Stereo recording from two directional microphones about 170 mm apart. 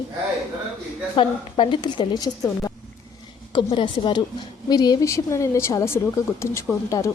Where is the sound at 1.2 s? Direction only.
30° left (ahead or behind).